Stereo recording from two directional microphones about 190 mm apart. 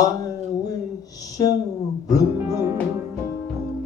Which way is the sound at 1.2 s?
20° left (ahead or behind).